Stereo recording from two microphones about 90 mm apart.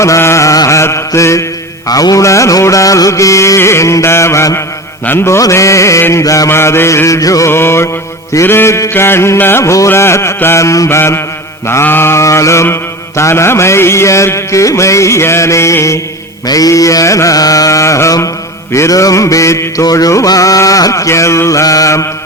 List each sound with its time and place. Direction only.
0.0 s mantra: 30° left (ahead or behind)
6.5 s mantra: 25° left (ahead or behind)